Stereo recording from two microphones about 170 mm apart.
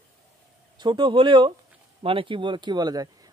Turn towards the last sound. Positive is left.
turn(degrees=-20)  # may be behind; listen again after turning